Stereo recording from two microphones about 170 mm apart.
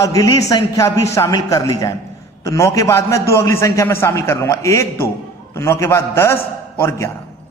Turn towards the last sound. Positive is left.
turn(degrees=15)  # may be behind; listen again after turning